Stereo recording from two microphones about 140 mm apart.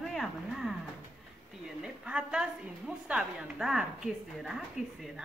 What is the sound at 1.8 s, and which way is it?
A woman's voice, 5° right (ahead or behind).